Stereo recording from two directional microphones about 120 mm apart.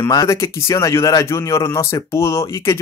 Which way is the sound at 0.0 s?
30° left (ahead or behind).